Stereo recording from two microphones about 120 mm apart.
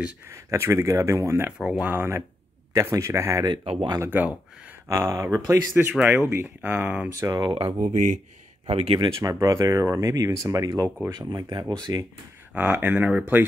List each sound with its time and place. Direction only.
0.3 s speech: 25° right (ahead or behind)
1.6 s speech: 10° right (ahead or behind); by 7.4 s 25° right (ahead or behind)
7.4 s speech: 45° right (ahead or behind)
7.8 s speech: 90° right
8.6 s speech: 55° right (ahead or behind)
9.2 s speech: 25° right (ahead or behind)
12.5 s speech: 10° right (ahead or behind)